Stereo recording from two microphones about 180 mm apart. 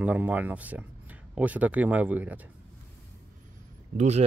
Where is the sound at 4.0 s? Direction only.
35° right (ahead or behind).